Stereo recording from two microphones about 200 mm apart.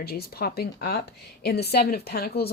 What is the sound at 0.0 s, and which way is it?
A woman's voice, 50° left (ahead or behind).